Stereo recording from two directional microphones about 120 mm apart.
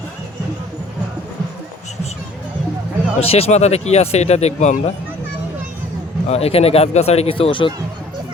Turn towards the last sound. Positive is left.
turn(degrees=45)  # may be behind; listen again after turning